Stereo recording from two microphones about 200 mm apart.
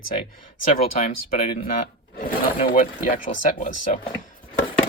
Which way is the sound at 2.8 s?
40° left (ahead or behind).